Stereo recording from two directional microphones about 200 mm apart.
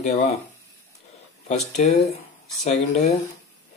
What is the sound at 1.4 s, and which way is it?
Speech, 35° left (ahead or behind).